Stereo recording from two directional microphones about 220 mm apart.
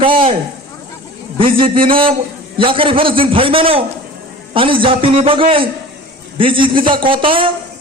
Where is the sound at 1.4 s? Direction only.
25° right (ahead or behind).